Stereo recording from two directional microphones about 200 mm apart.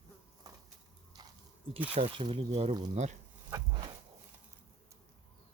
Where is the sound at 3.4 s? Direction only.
15° right (ahead or behind).